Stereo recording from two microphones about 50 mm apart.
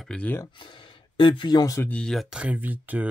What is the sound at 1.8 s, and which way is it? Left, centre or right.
Speech, left.